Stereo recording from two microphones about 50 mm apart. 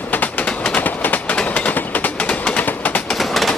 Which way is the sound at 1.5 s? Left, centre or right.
Left.